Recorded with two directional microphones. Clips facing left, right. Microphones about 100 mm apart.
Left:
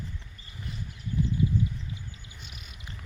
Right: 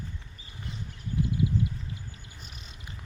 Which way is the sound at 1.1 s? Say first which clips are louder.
Even; 40° right (ahead or behind).